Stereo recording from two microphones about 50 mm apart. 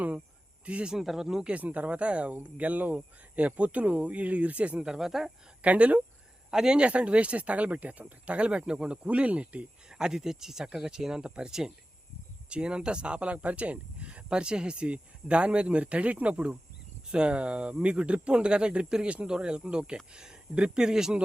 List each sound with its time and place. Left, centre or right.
0.6 s speech: right
0.9 s speech: centre
1.5 s speech: right
4.9 s speech: centre
5.6 s speech: right
6.5 s speech: centre
9.9 s speech: centre